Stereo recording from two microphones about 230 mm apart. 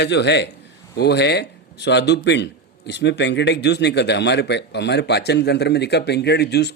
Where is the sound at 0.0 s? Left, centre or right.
Left.